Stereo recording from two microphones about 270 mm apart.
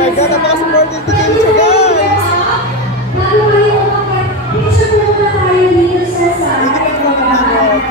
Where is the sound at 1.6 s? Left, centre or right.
Left.